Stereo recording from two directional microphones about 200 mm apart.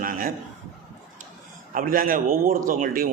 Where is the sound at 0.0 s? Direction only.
45° right (ahead or behind).